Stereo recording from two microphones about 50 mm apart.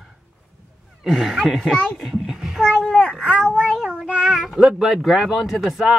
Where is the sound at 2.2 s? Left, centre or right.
Centre.